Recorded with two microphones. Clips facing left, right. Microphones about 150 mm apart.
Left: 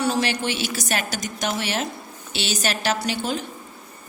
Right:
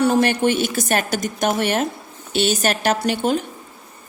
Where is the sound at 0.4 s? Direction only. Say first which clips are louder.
Right 8 dB; 50° right (ahead or behind).